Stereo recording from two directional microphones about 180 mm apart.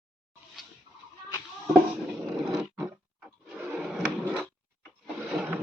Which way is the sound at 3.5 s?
10° right (ahead or behind).